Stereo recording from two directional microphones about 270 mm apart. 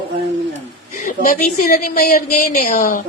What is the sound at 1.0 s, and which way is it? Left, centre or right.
A woman's voice, left.